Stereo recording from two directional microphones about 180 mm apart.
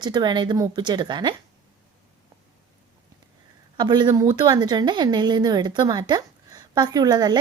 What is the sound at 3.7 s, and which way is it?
A woman's voice, 25° right (ahead or behind).